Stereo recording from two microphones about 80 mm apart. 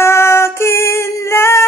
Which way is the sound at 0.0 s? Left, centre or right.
Left.